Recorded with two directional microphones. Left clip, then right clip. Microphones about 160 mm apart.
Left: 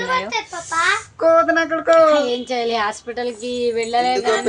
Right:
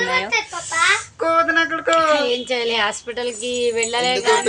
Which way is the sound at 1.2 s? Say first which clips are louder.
Left 5 dB; 35° left (ahead or behind).